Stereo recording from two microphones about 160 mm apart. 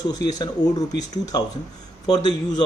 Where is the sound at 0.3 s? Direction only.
25° left (ahead or behind).